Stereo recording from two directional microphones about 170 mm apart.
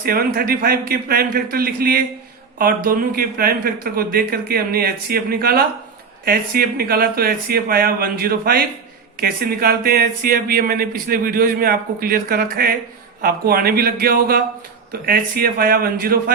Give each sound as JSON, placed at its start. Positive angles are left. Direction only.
{"t": 0.0, "sound": "speech", "side_deg": -60}